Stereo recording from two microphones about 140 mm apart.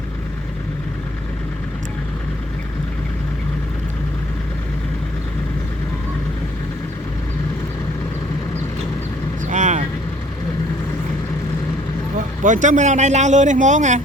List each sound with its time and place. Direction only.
9.5 s vehicle: 60° right (ahead or behind)
12.4 s a man's voice: 65° right (ahead or behind)